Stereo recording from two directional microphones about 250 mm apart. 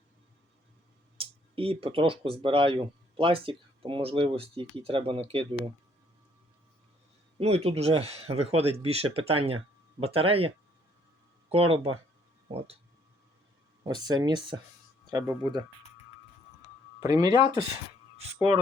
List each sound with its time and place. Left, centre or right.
1.2 s speech: right
7.3 s speech: right
13.8 s speech: centre
17.0 s speech: centre